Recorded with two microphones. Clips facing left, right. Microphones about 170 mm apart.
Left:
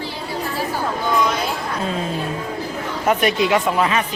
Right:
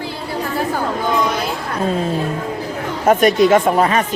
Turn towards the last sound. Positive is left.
turn(degrees=-45)  # may be behind; listen again after turning